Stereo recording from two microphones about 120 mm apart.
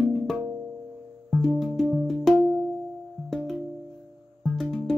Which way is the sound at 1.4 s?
Centre (ahead or behind).